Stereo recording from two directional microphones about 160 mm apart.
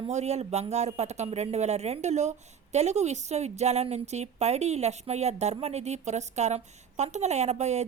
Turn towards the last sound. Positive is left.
turn(degrees=-45)  # may be behind; listen again after turning